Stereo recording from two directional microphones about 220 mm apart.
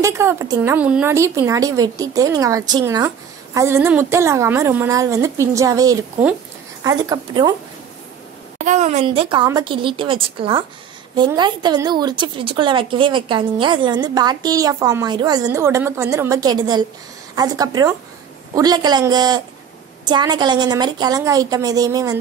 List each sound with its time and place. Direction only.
0.0 s speech: 15° right (ahead or behind)
8.5 s a woman's voice: 30° right (ahead or behind); by 22.2 s 15° right (ahead or behind)